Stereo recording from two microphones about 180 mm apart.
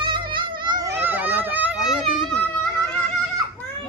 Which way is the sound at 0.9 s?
10° right (ahead or behind).